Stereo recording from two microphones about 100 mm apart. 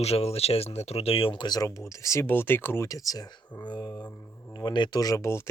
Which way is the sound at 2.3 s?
20° left (ahead or behind).